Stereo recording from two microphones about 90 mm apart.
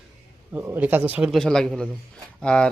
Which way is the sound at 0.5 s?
20° right (ahead or behind).